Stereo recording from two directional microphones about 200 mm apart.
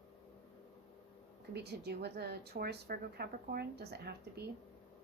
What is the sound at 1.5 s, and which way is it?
Speech, 55° right (ahead or behind).